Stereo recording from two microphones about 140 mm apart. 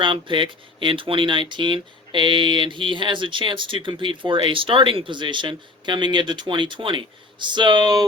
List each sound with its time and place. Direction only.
0.0 s speech: 35° right (ahead or behind)